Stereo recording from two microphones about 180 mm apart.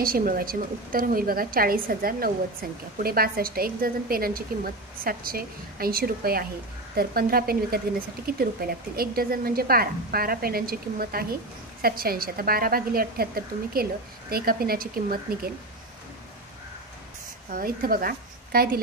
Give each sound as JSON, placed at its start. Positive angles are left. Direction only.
{"t": 0.0, "sound": "a woman's voice", "side_deg": -55}
{"t": 17.5, "sound": "speech", "side_deg": -55}